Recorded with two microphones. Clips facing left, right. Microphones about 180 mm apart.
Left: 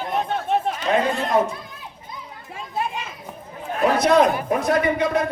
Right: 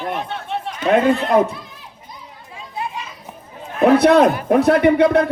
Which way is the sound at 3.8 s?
60° right (ahead or behind).